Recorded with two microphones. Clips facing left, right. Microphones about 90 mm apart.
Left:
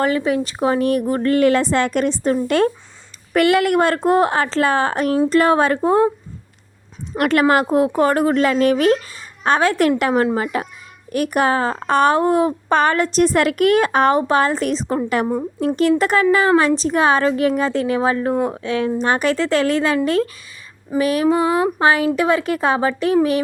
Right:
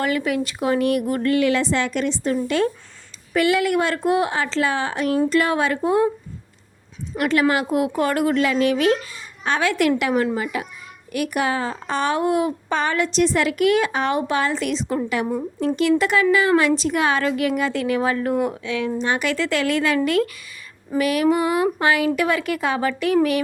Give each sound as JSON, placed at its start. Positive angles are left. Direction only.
{"t": 0.0, "sound": "a woman's voice", "side_deg": 30}
{"t": 7.2, "sound": "a woman's voice", "side_deg": 60}
{"t": 7.4, "sound": "a woman's voice", "side_deg": 45}
{"t": 12.1, "sound": "a woman's voice", "side_deg": 35}
{"t": 12.7, "sound": "a woman's voice", "side_deg": 50}
{"t": 21.0, "sound": "a woman's voice", "side_deg": 35}